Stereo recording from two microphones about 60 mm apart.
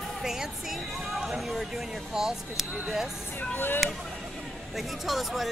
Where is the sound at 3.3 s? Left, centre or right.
Left.